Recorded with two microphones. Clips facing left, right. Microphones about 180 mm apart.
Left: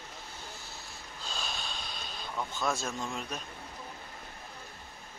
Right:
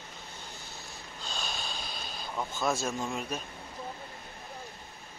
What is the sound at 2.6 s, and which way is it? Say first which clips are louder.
Speech: right 3 dB; 5° right (ahead or behind).